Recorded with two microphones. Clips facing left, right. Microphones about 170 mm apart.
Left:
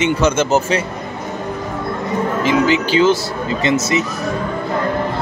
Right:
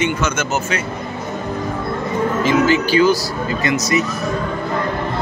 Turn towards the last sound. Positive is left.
turn(degrees=25)  # may be behind; listen again after turning